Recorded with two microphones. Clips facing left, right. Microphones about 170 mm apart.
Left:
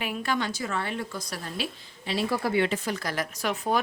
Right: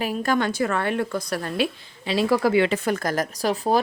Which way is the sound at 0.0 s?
40° right (ahead or behind).